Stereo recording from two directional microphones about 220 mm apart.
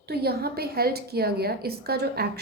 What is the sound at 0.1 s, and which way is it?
A woman's voice, 45° right (ahead or behind).